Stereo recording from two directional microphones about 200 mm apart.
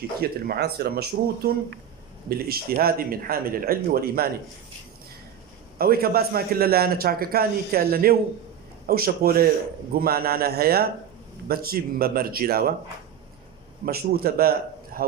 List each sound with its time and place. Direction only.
0.2 s a man's voice: 50° right (ahead or behind)
5.8 s a man's voice: 50° right (ahead or behind)
13.8 s a man's voice: 50° right (ahead or behind)
14.9 s a sound: 45° right (ahead or behind)